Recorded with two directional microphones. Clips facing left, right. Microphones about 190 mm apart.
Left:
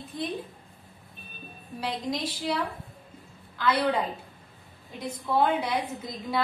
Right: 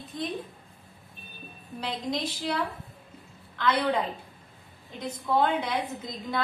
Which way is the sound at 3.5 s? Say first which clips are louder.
Even; 5° left (ahead or behind).